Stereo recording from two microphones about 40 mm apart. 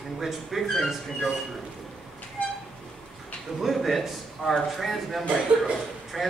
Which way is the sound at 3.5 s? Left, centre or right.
Centre.